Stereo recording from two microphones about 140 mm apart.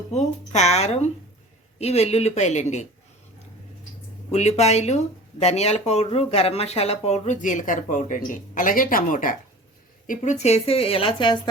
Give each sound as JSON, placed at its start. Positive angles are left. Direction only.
{"t": 0.1, "sound": "speech", "side_deg": 55}
{"t": 4.3, "sound": "speech", "side_deg": 50}
{"t": 10.1, "sound": "speech", "side_deg": 55}